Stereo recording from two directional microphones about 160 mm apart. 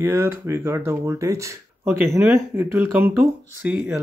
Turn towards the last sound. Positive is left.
turn(degrees=-10)  # may be behind; listen again after turning